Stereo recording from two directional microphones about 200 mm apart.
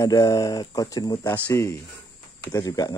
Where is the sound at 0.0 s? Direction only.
15° left (ahead or behind).